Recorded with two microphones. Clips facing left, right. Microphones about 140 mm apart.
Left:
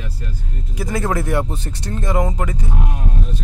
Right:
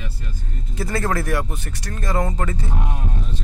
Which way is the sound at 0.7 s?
15° left (ahead or behind).